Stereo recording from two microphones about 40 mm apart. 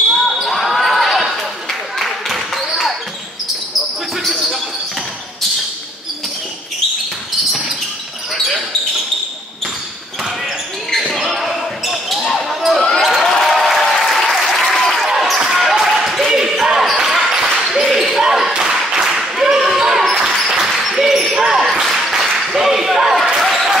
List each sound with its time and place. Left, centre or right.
0.1 s basketball bounce: centre
11.0 s basketball bounce: centre
13.0 s a sound: centre
13.3 s applause: centre
15.0 s basketball bounce: centre
15.7 s a sound: centre
17.0 s basketball bounce: centre
17.8 s basketball bounce: centre
21.4 s basketball bounce: centre
21.8 s a sound: centre
22.5 s basketball bounce: centre